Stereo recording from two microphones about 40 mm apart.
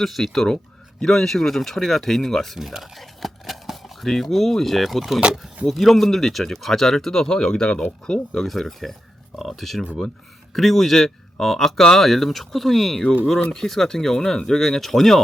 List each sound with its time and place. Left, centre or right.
0.0 s speech: centre
2.6 s a sound: centre
4.1 s speech: centre
5.2 s speech: right
5.6 s speech: centre; by 8.4 s left
8.4 s speech: centre